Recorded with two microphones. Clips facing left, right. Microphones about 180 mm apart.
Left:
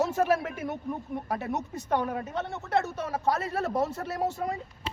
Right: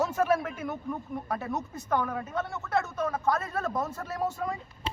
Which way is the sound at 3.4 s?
70° left (ahead or behind).